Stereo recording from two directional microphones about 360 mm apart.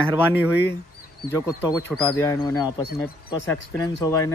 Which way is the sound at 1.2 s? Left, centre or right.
Centre.